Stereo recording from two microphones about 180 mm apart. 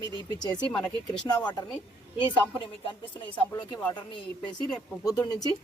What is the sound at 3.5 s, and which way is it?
Speech, 25° left (ahead or behind).